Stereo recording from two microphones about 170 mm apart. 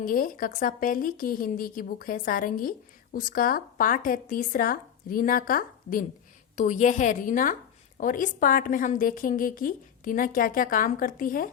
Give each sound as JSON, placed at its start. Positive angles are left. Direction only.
{"t": 0.0, "sound": "a woman's voice", "side_deg": 55}
{"t": 6.6, "sound": "a woman's voice", "side_deg": 45}